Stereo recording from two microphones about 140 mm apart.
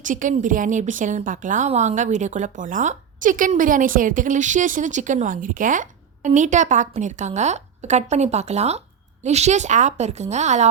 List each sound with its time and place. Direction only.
0.0 s a woman's voice: 65° right (ahead or behind)